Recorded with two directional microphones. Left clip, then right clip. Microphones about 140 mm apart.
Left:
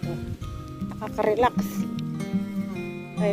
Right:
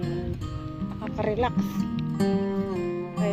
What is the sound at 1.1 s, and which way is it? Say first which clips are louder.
Speech: left 5 dB; 40° left (ahead or behind).